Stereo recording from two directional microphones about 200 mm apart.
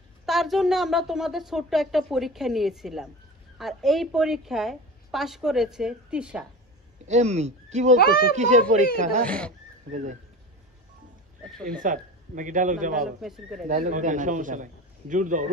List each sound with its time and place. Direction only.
0.2 s speech: centre (ahead or behind)
7.1 s a man's voice: 35° right (ahead or behind)
8.0 s speech: 50° left (ahead or behind)
8.4 s a man's voice: 35° right (ahead or behind)
9.2 s speech: 5° left (ahead or behind)
11.8 s a man's voice: 40° right (ahead or behind)
13.2 s speech: centre (ahead or behind)
13.7 s a man's voice: 40° right (ahead or behind)